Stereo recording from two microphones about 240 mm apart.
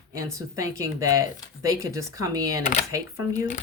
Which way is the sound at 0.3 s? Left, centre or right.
Centre.